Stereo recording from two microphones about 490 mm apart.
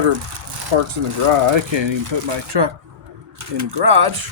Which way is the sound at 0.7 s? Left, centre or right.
Right.